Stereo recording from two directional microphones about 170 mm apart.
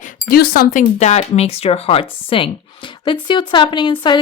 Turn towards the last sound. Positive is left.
turn(degrees=25)  # may be behind; listen again after turning